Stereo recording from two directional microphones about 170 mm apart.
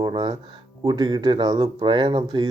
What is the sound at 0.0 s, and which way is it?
Speech, 30° right (ahead or behind).